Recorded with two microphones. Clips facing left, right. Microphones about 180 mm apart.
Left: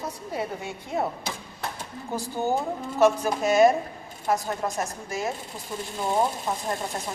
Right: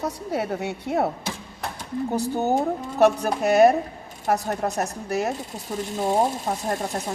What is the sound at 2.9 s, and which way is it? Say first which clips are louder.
Speech: right 2 dB; 65° right (ahead or behind).